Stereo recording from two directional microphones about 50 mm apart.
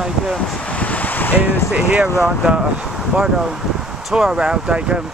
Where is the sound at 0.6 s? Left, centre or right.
Left.